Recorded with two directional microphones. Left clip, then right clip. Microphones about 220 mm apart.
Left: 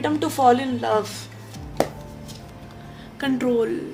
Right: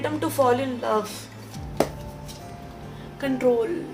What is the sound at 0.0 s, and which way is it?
Speech, 45° left (ahead or behind).